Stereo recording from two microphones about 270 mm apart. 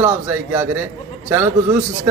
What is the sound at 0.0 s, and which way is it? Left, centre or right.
A man's voice, centre.